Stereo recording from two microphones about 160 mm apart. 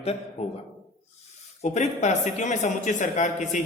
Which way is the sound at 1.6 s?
45° left (ahead or behind).